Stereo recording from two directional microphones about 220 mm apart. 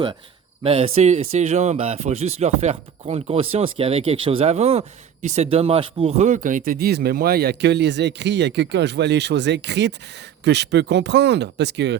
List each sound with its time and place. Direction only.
0.6 s speech: 25° right (ahead or behind); by 11.9 s 50° right (ahead or behind)